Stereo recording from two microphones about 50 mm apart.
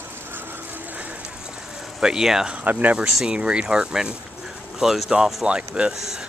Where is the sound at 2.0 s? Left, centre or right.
Centre.